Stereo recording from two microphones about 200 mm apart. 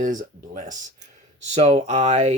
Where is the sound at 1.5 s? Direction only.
35° right (ahead or behind).